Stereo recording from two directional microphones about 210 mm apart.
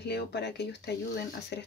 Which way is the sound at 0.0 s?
55° left (ahead or behind).